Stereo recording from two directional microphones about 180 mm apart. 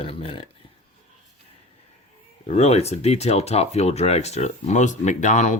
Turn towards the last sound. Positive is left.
turn(degrees=40)  # may be behind; listen again after turning